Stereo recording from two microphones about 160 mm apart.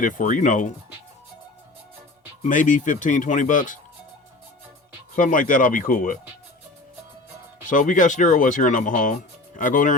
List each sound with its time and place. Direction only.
0.0 s speech: 55° left (ahead or behind)
2.5 s speech: 55° left (ahead or behind)
5.1 s speech: 55° left (ahead or behind)
7.6 s speech: 55° left (ahead or behind)